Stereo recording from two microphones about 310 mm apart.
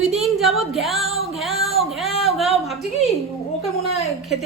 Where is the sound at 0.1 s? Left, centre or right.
Centre.